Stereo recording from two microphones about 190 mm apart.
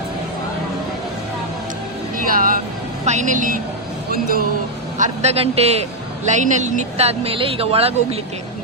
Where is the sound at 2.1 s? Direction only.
45° right (ahead or behind).